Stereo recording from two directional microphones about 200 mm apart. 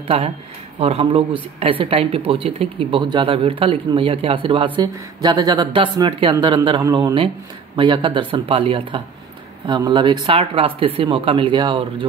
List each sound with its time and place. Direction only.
0.0 s speech: 30° right (ahead or behind)